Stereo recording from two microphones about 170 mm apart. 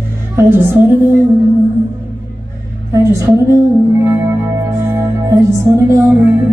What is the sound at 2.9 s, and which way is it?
Speech, 15° right (ahead or behind).